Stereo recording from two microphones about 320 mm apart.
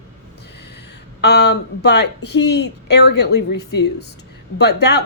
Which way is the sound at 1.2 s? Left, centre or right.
Left.